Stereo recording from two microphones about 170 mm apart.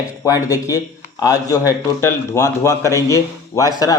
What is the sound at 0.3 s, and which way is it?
A man's voice, 20° left (ahead or behind).